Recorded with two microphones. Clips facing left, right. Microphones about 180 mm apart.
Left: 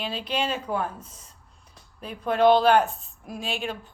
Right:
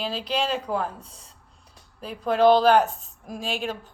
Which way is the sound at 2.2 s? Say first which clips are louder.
Right 1 dB; 40° right (ahead or behind).